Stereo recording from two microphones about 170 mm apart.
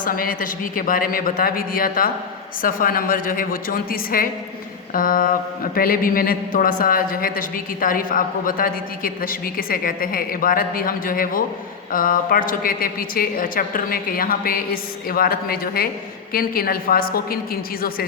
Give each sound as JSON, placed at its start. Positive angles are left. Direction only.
{"t": 0.0, "sound": "speech", "side_deg": 55}